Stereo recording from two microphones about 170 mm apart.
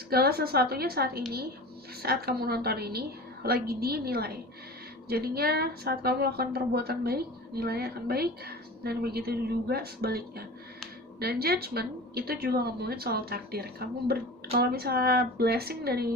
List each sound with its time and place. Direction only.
0.1 s a woman's voice: 65° right (ahead or behind)